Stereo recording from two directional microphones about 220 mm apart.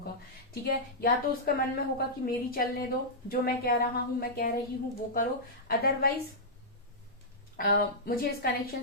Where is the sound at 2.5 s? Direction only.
40° left (ahead or behind).